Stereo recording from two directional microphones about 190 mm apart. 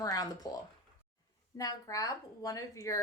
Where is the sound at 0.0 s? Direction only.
20° left (ahead or behind).